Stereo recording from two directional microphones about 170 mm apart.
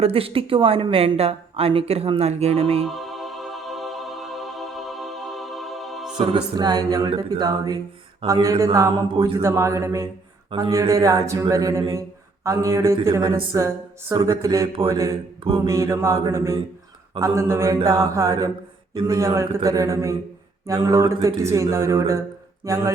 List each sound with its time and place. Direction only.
0.0 s speech: 35° right (ahead or behind)
2.8 s music: centre (ahead or behind)
6.1 s speech: 25° right (ahead or behind)